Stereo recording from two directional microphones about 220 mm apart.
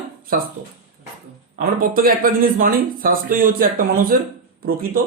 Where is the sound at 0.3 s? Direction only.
40° right (ahead or behind).